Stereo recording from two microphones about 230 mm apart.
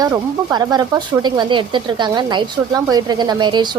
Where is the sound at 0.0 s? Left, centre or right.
Centre.